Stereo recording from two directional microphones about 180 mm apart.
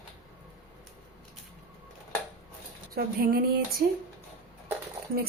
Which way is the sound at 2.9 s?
55° right (ahead or behind).